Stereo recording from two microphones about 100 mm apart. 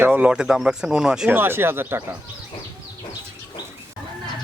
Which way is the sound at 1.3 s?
20° right (ahead or behind).